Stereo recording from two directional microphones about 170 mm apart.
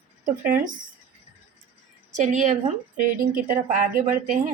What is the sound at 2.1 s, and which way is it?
A woman's voice, 45° right (ahead or behind).